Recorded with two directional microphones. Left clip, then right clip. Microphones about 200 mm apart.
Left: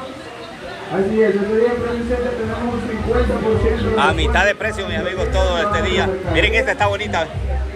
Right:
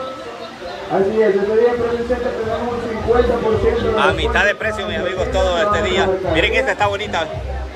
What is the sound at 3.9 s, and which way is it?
A man's voice, 10° right (ahead or behind).